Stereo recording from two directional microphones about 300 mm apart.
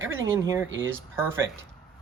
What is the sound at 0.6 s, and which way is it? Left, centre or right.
Speech, right.